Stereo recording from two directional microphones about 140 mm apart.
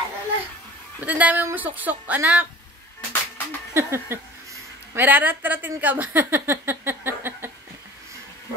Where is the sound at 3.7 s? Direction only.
20° right (ahead or behind).